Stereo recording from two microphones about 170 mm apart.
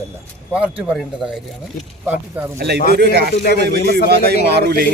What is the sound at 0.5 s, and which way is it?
Speech, 5° right (ahead or behind).